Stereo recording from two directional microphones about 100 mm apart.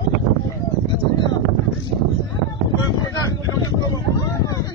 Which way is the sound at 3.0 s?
35° left (ahead or behind).